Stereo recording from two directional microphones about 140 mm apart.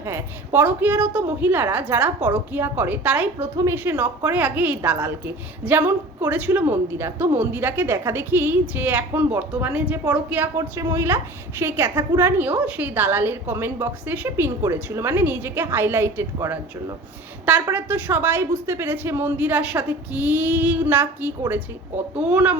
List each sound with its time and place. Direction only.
0.0 s a woman's voice: 15° right (ahead or behind)